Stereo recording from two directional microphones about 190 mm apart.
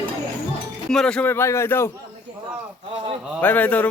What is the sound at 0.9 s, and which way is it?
A man's voice, 5° left (ahead or behind).